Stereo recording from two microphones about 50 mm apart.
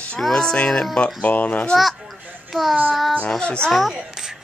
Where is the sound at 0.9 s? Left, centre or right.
Left.